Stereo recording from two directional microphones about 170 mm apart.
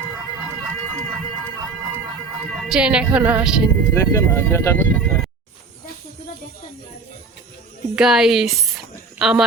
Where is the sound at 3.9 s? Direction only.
15° left (ahead or behind).